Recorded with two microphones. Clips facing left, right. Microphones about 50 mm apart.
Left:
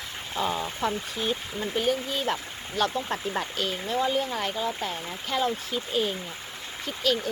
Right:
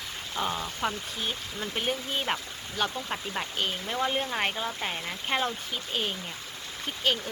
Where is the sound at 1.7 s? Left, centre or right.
Right.